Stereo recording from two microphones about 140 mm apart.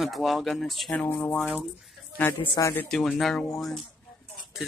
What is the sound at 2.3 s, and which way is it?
Speech, 35° left (ahead or behind).